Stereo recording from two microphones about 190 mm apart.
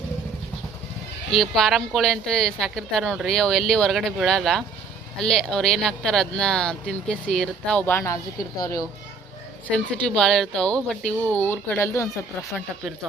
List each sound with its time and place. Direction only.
1.3 s a woman's voice: centre (ahead or behind)
9.7 s a woman's voice: 5° left (ahead or behind)